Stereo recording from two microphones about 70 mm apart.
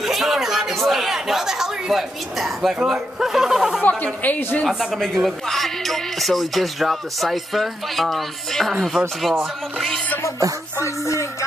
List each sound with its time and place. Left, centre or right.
0.0 s a man's voice: centre
4.0 s speech: left
4.6 s music: centre
10.8 s music: left